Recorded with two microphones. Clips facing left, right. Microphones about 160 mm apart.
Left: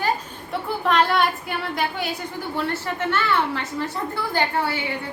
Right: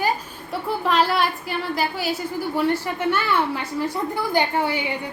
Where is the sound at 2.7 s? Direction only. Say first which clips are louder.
Right 2 dB; 10° right (ahead or behind).